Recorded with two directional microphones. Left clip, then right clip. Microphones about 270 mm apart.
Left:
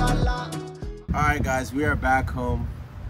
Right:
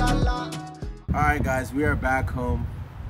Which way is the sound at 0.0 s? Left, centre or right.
Centre.